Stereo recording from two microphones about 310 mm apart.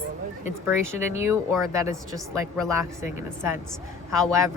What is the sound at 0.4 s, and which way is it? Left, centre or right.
A woman's voice, centre.